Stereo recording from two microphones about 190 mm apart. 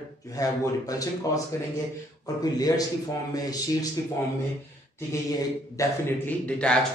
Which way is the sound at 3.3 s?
20° left (ahead or behind).